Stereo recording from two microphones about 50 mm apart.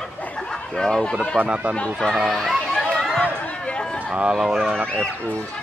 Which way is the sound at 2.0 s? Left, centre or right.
Centre.